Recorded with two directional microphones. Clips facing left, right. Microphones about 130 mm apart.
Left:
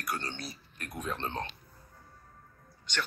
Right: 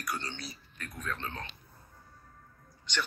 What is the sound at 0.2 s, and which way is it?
Speech, 50° left (ahead or behind).